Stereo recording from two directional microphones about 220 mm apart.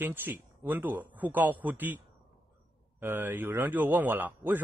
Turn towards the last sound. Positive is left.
turn(degrees=-10)  # may be behind; listen again after turning